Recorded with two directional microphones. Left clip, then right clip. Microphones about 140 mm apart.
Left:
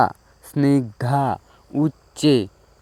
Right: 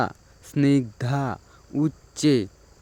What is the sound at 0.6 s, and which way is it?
Speech, 5° left (ahead or behind).